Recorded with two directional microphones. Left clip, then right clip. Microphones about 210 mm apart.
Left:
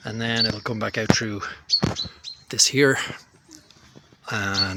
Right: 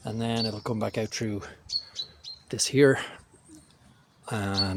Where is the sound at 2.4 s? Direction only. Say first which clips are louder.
Left 3 dB; 5° right (ahead or behind).